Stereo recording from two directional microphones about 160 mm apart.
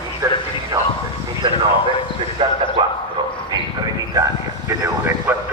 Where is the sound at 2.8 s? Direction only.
25° right (ahead or behind).